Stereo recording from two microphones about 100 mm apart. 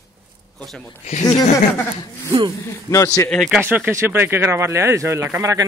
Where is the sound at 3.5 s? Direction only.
15° right (ahead or behind).